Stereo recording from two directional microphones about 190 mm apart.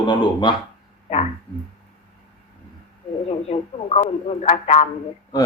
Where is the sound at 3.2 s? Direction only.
35° left (ahead or behind).